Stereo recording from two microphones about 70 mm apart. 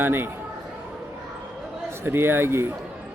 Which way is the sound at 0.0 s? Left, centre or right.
Right.